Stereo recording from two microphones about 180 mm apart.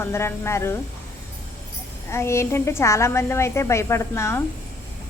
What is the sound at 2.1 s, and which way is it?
Speech, 15° left (ahead or behind).